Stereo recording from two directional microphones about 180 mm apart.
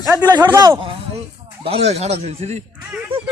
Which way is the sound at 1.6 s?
35° right (ahead or behind).